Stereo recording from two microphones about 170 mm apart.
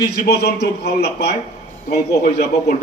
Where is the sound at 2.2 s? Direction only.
45° left (ahead or behind).